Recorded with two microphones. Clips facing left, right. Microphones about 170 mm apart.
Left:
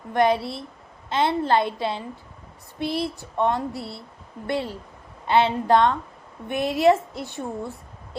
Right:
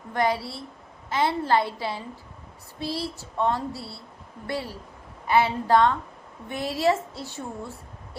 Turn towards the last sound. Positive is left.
turn(degrees=20)  # may be behind; listen again after turning